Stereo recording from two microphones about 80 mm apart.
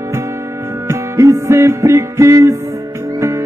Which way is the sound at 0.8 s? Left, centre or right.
Right.